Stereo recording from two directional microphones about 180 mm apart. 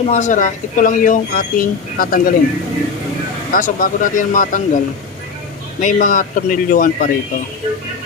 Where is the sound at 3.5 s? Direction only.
50° left (ahead or behind).